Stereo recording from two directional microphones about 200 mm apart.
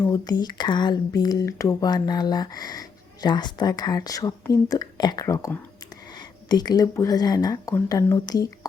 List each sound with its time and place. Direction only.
0.0 s speech: 20° left (ahead or behind)